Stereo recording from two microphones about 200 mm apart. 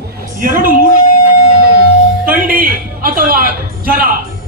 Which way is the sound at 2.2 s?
45° right (ahead or behind).